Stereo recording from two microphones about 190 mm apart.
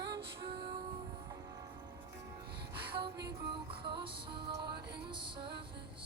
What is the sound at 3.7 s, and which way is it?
Music, 25° right (ahead or behind).